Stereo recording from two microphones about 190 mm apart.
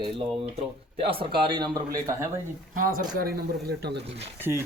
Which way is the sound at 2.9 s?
50° right (ahead or behind).